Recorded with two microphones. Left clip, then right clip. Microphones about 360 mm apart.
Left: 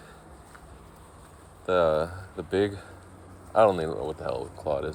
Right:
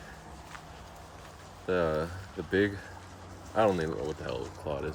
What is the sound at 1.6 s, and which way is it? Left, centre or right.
Speech, centre.